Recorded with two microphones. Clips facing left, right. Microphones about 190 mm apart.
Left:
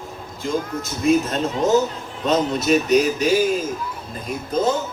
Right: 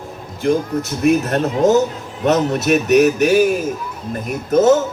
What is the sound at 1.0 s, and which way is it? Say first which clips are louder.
Speech: right 2 dB; 65° right (ahead or behind).